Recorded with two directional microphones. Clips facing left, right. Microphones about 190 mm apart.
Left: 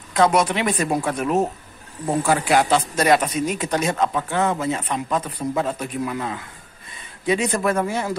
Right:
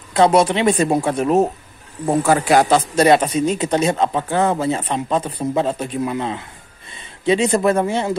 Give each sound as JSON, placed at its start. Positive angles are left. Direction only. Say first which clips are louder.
{"t": 0.1, "sound": "speech", "louder": "right 4 dB", "side_deg": -30}
{"t": 2.2, "sound": "speech", "louder": "right 4 dB", "side_deg": -40}
{"t": 3.0, "sound": "speech", "louder": "right 5 dB", "side_deg": -30}